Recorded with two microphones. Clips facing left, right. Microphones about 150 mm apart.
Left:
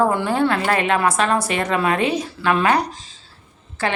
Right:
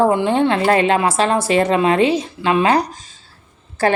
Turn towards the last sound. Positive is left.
turn(degrees=-40)  # may be behind; listen again after turning